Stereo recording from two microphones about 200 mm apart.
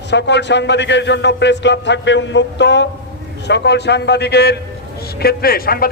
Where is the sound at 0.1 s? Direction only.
60° left (ahead or behind).